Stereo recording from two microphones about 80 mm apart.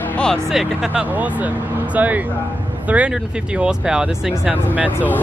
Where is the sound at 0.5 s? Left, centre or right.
Centre.